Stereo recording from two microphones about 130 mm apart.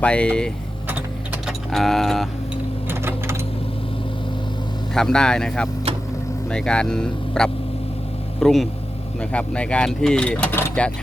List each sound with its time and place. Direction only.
0.0 s speech: 10° left (ahead or behind)
0.9 s a sound: 15° right (ahead or behind)
1.5 s speech: centre (ahead or behind)
2.9 s sewing machine: 20° right (ahead or behind)
4.9 s speech: 5° left (ahead or behind)